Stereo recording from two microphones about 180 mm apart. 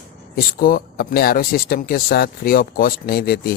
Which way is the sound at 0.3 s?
55° left (ahead or behind).